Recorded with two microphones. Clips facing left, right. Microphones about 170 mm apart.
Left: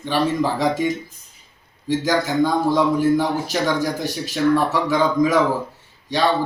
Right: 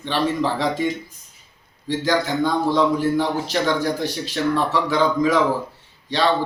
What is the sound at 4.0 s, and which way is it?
Speech, 40° left (ahead or behind).